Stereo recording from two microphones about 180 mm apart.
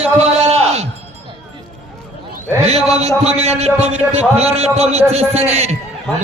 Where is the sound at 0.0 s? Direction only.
35° right (ahead or behind).